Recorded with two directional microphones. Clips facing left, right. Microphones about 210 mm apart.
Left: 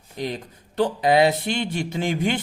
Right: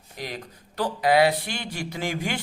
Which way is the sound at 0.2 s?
25° left (ahead or behind).